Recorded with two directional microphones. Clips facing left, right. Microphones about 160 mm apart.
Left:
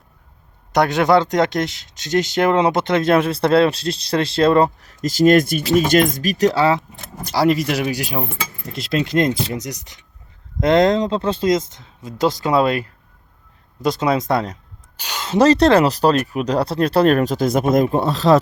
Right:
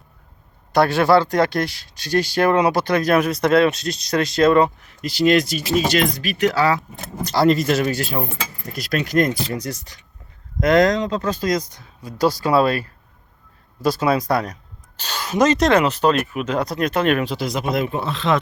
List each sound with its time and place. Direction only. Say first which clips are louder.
0.7 s speech: even; 20° left (ahead or behind)
7.3 s speech: right 1 dB; 10° left (ahead or behind)
8.7 s speech: left 1 dB; 25° left (ahead or behind)
14.9 s a sound: even; 15° left (ahead or behind)
15.3 s speech: left 3 dB; 30° left (ahead or behind)